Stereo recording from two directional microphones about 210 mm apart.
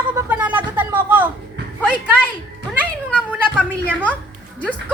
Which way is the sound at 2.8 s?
5° left (ahead or behind).